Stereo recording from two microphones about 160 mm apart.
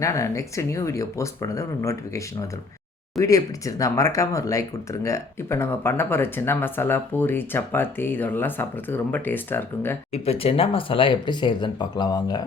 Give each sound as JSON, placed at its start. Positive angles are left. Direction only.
{"t": 0.0, "sound": "speech", "side_deg": 20}
{"t": 10.1, "sound": "speech", "side_deg": 40}